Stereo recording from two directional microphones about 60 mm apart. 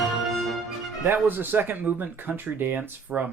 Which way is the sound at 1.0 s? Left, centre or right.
Right.